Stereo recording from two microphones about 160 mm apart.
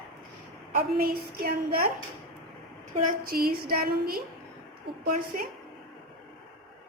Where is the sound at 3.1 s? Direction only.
65° right (ahead or behind).